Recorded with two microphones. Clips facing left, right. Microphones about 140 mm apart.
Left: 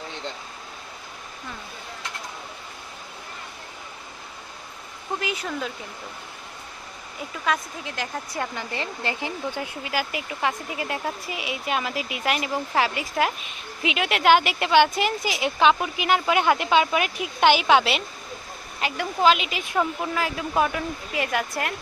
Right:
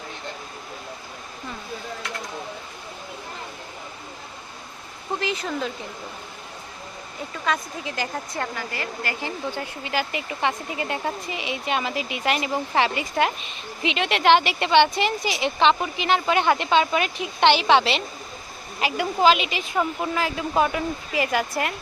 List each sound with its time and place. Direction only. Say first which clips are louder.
5.2 s speech: right 3 dB; 10° left (ahead or behind)
7.4 s speech: even; centre (ahead or behind)
8.5 s speech: even; 25° left (ahead or behind)
9.2 s speech: even; 5° left (ahead or behind)